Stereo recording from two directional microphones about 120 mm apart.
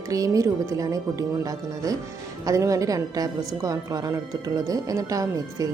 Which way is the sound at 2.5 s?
30° right (ahead or behind).